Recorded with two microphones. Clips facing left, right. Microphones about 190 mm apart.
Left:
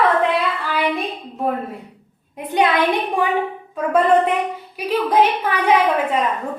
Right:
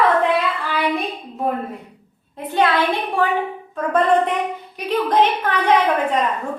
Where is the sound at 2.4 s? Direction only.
15° left (ahead or behind).